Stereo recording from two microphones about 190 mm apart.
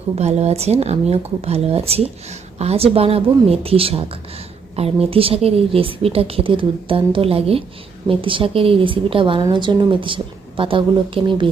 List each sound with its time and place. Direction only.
0.2 s a woman's voice: 35° right (ahead or behind)